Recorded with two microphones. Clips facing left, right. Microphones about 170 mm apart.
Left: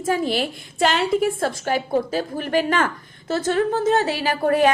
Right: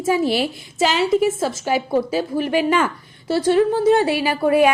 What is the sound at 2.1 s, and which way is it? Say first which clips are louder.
Speech: right 2 dB; 45° left (ahead or behind).